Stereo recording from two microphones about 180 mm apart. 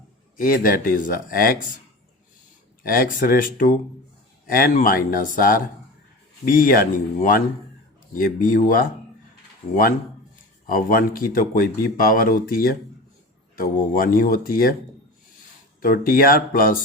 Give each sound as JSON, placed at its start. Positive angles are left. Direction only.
{"t": 0.3, "sound": "speech", "side_deg": 50}
{"t": 2.8, "sound": "speech", "side_deg": 55}
{"t": 10.3, "sound": "speech", "side_deg": 50}
{"t": 15.8, "sound": "speech", "side_deg": 55}